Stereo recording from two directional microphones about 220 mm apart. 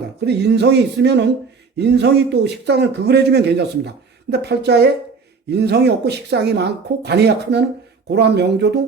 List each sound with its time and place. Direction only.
0.3 s speech: 50° right (ahead or behind)